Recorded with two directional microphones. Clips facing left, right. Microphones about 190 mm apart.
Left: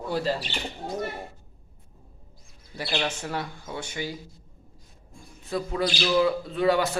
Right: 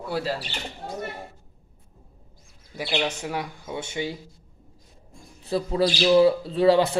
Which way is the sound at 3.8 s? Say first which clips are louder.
Right 4 dB; 25° right (ahead or behind).